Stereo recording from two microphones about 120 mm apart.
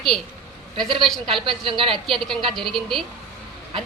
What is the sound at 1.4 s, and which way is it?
Speech, 45° right (ahead or behind).